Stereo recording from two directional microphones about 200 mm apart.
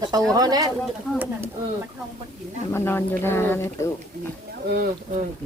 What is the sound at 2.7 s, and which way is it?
Speech, 10° left (ahead or behind).